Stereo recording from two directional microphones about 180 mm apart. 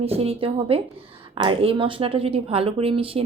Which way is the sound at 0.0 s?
35° right (ahead or behind).